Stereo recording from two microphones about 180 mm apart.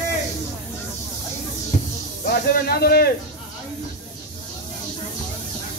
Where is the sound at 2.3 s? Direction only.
60° left (ahead or behind).